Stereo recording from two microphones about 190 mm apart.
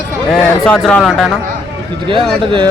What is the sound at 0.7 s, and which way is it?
Speech, 5° left (ahead or behind).